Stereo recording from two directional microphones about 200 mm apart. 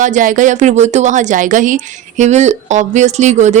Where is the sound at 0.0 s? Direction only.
40° right (ahead or behind).